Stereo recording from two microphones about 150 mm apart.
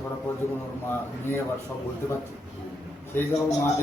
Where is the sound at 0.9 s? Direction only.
15° left (ahead or behind).